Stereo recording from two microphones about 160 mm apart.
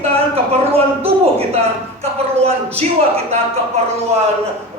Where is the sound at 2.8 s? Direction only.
40° right (ahead or behind).